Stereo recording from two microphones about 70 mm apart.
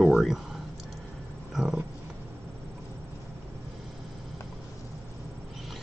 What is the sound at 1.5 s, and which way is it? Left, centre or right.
Roaring cats, centre.